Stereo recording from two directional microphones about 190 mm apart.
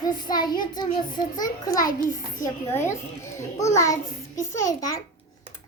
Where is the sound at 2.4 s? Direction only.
15° left (ahead or behind).